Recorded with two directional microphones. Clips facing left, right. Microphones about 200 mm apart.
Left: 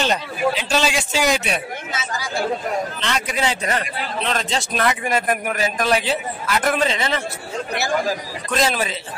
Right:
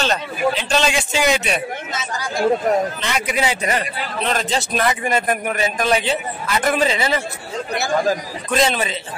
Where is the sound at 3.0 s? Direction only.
10° right (ahead or behind).